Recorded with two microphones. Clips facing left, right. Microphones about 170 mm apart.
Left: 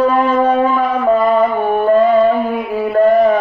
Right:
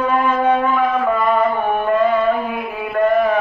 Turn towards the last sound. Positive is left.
turn(degrees=35)  # may be behind; listen again after turning